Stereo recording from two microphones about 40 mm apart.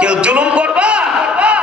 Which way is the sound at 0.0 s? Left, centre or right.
Right.